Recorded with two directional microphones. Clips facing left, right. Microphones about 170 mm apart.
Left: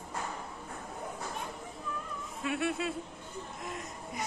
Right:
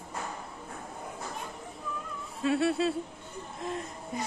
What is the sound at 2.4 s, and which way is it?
Speech, 30° right (ahead or behind).